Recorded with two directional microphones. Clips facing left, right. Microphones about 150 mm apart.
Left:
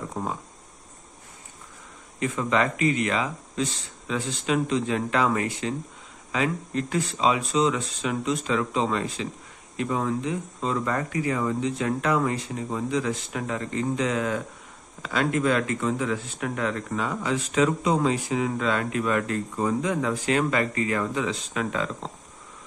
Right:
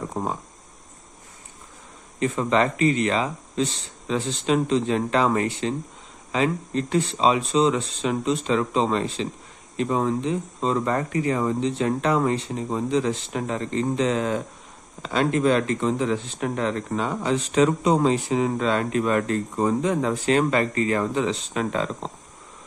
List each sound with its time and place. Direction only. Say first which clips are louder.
0.1 s cricket: right 2 dB; 30° right (ahead or behind)
2.1 s speech: right 3 dB; 30° right (ahead or behind)